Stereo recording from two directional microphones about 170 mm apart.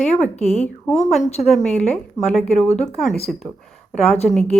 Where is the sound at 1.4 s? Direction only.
Centre (ahead or behind).